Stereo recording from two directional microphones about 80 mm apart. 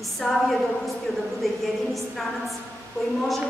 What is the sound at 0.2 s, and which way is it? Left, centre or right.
A woman's voice, centre.